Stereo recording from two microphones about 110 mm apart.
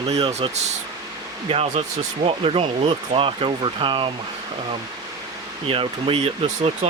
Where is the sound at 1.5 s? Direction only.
60° right (ahead or behind).